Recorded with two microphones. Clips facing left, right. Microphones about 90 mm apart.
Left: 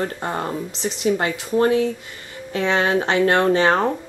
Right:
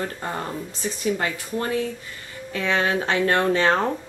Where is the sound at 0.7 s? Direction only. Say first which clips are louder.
Left 4 dB; 85° left.